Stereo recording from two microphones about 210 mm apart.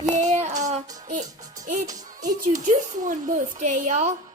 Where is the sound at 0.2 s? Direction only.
30° right (ahead or behind).